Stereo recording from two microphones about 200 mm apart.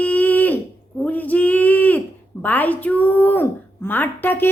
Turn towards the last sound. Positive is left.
turn(degrees=10)  # may be behind; listen again after turning